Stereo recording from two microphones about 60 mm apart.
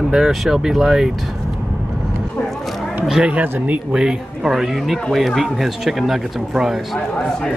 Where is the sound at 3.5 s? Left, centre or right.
Right.